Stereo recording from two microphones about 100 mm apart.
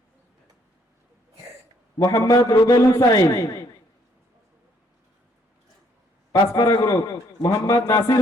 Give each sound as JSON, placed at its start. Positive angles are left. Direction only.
{"t": 2.0, "sound": "a man's voice", "side_deg": 35}
{"t": 6.3, "sound": "a man's voice", "side_deg": 35}